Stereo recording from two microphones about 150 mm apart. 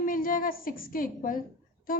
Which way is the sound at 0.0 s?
70° left (ahead or behind).